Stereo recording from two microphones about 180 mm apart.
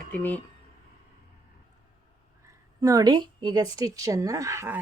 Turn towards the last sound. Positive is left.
turn(degrees=-15)  # may be behind; listen again after turning